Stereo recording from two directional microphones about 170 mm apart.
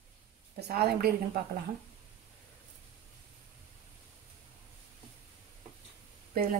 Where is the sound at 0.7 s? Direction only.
65° right (ahead or behind).